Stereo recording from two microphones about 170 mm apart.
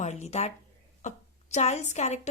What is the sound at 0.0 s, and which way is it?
A woman's voice, 40° left (ahead or behind).